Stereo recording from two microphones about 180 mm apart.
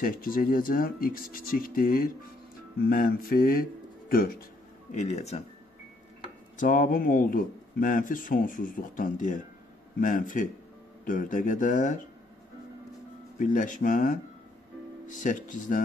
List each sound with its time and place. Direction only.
0.0 s speech: 50° left (ahead or behind)
2.9 s mantra: 55° left (ahead or behind)
4.9 s speech: 40° left (ahead or behind)
6.5 s speech: 45° left (ahead or behind)
13.4 s speech: 45° left (ahead or behind)